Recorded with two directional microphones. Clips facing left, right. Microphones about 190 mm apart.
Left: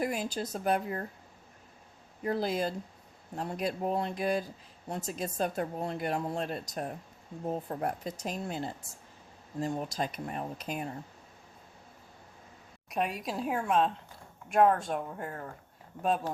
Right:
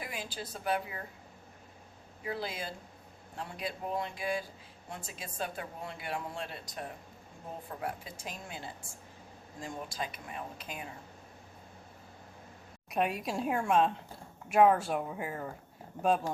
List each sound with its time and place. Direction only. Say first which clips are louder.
0.0 s speech: left 9 dB; 45° left (ahead or behind)
2.2 s speech: left 8 dB; 45° left (ahead or behind)
12.9 s speech: right 1 dB; centre (ahead or behind)